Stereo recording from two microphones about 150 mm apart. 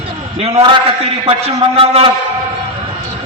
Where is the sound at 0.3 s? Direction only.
40° right (ahead or behind).